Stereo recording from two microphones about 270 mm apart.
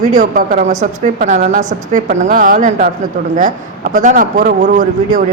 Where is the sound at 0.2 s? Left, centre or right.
Right.